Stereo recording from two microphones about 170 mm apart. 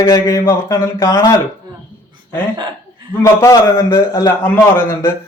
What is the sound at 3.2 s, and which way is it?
A man's voice, 15° left (ahead or behind).